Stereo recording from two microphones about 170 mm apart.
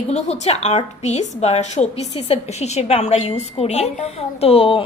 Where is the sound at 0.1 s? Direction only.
40° left (ahead or behind).